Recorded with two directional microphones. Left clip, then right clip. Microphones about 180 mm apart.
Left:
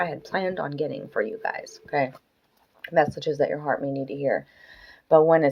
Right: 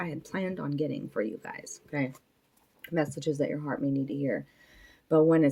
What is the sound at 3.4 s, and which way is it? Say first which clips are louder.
Speech: left 11 dB; 20° right (ahead or behind).